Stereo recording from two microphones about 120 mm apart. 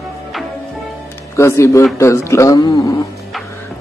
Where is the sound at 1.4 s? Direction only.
25° left (ahead or behind).